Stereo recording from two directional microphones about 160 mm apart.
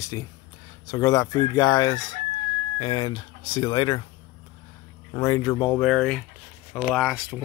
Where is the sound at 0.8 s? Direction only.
20° left (ahead or behind).